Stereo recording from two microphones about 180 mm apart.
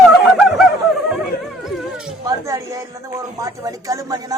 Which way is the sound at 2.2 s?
20° right (ahead or behind).